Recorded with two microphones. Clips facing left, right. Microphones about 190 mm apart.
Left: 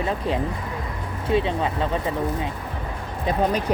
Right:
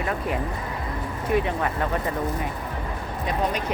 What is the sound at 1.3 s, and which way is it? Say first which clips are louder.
Speech: left 2 dB; 20° left (ahead or behind).